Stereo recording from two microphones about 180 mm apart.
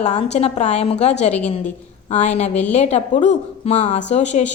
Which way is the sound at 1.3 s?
10° left (ahead or behind).